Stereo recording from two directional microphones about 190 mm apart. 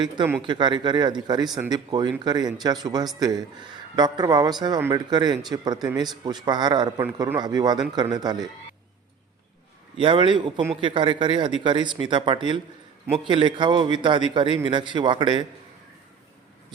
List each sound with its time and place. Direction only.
0.4 s a man's voice: 25° right (ahead or behind)
10.0 s a man's voice: 25° right (ahead or behind)